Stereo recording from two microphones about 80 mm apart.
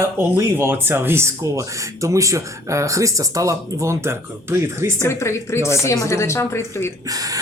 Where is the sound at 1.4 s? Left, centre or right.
Right.